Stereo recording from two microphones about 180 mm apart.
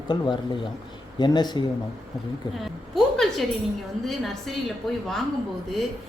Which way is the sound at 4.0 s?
Centre (ahead or behind).